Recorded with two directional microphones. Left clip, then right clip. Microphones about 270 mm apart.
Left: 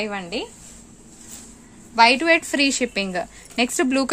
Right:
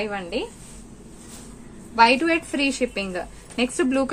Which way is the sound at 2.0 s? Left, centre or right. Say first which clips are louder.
Left 2 dB; left.